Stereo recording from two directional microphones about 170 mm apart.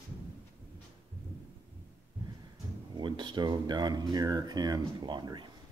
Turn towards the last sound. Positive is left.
turn(degrees=-25)  # may be behind; listen again after turning